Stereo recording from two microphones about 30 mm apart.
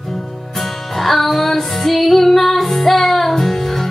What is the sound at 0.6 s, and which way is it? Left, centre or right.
Music, centre.